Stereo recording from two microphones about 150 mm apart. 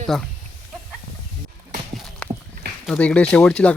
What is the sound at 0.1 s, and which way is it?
Speech, 5° right (ahead or behind).